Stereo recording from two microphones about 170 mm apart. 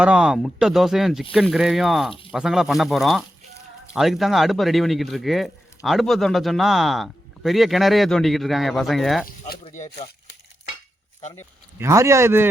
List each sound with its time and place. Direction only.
0.0 s speech: 5° right (ahead or behind)
11.8 s speech: 15° right (ahead or behind)